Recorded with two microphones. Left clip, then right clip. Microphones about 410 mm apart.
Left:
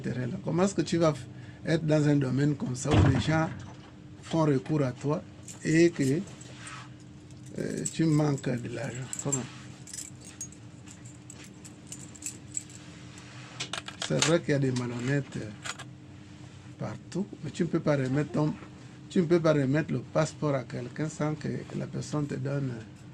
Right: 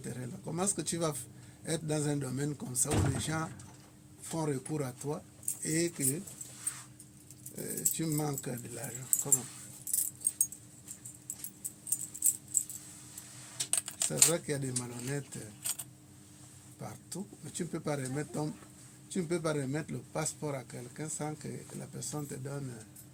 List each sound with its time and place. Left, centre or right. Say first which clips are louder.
0.0 s a sound: left 8 dB; right
1.6 s speech: left 8 dB; right
7.6 s speech: left 7 dB; right
10.4 s keys jangling: right 5 dB; right
14.1 s speech: left 6 dB; right
16.8 s speech: left 8 dB; right